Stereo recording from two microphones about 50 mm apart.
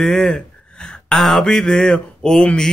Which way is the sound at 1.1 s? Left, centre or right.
Centre.